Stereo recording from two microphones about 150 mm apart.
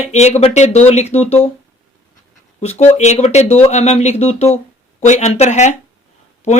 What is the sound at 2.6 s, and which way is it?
Speech, 45° left (ahead or behind).